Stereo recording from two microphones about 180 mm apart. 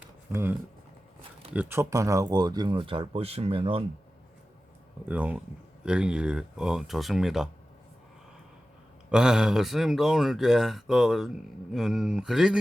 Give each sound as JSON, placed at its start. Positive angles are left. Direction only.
{"t": 0.3, "sound": "speech", "side_deg": -15}
{"t": 1.5, "sound": "speech", "side_deg": -15}
{"t": 5.0, "sound": "speech", "side_deg": -10}
{"t": 9.0, "sound": "speech", "side_deg": -5}